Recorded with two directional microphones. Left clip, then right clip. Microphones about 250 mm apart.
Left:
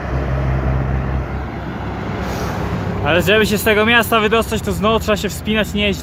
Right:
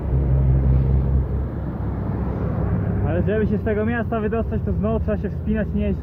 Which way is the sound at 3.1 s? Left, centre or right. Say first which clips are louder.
Left 10 dB; left.